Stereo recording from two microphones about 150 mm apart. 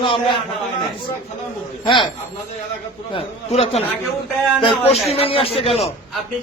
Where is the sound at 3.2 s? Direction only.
40° left (ahead or behind).